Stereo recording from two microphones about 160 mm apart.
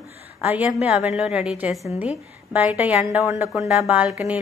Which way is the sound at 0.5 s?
10° right (ahead or behind).